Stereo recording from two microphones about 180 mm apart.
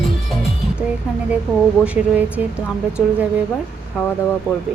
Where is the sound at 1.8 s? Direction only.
10° right (ahead or behind).